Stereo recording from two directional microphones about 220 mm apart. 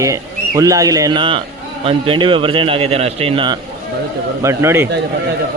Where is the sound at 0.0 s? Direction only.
15° right (ahead or behind).